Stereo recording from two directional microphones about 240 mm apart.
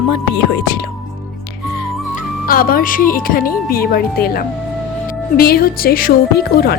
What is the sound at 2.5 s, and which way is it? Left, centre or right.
A woman's voice, left.